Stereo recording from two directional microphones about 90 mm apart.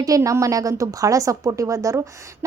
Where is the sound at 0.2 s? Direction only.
35° right (ahead or behind).